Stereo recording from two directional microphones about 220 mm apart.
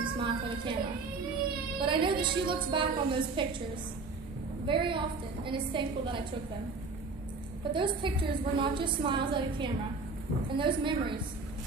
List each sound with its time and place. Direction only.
0.0 s a sound: 20° right (ahead or behind)
1.8 s a woman's voice: 20° right (ahead or behind)
4.6 s a woman's voice: 20° right (ahead or behind)
7.7 s a woman's voice: 20° right (ahead or behind)